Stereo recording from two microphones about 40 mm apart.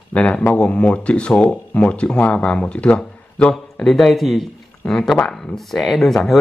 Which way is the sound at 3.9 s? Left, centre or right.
Centre.